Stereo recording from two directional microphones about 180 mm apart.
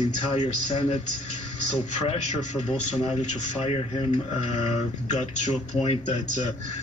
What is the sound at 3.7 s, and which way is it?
Speech, 35° left (ahead or behind).